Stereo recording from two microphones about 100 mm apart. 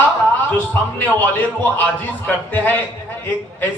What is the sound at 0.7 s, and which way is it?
A man's voice, 20° left (ahead or behind).